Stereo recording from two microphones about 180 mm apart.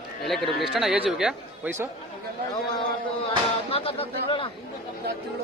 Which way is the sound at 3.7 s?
30° left (ahead or behind).